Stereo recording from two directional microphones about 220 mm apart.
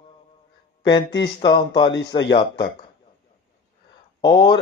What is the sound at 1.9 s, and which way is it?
Speech, 50° left (ahead or behind).